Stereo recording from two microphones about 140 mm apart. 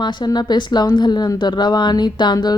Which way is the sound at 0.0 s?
30° left (ahead or behind).